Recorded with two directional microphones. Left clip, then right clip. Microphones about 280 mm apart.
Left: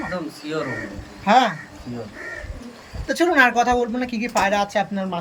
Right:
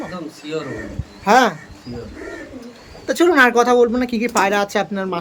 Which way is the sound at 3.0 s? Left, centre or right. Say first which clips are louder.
Right 3 dB; centre.